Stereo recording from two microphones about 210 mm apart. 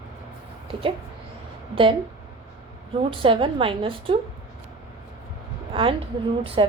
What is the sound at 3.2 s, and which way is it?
A woman's voice, 25° right (ahead or behind).